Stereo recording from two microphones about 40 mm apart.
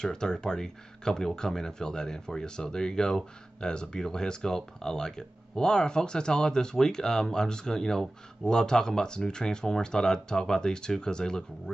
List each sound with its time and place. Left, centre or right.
0.0 s speech: centre